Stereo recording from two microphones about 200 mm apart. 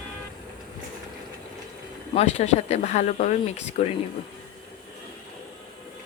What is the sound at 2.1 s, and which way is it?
Speech, 30° left (ahead or behind).